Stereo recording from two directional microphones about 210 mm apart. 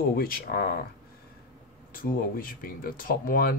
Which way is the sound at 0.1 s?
45° left (ahead or behind).